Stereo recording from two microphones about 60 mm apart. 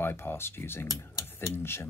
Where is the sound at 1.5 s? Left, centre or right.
Left.